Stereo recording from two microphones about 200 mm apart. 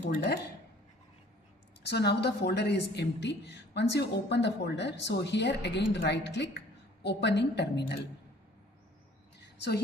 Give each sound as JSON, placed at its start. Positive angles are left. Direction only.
{"t": 0.0, "sound": "a woman's voice", "side_deg": 55}
{"t": 1.8, "sound": "a woman's voice", "side_deg": 55}